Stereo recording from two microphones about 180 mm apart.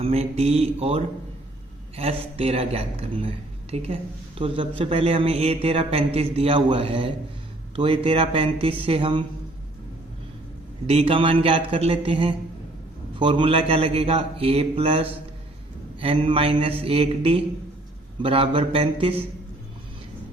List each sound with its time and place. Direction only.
0.0 s a man's voice: 35° right (ahead or behind)
10.8 s a man's voice: 30° right (ahead or behind)